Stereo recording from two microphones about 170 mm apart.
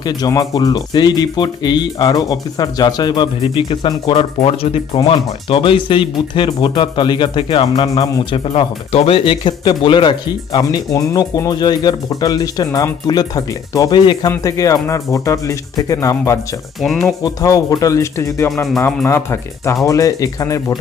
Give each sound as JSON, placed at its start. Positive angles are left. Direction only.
{"t": 0.0, "sound": "speech", "side_deg": 25}
{"t": 16.8, "sound": "speech", "side_deg": 0}
{"t": 17.2, "sound": "speech", "side_deg": 20}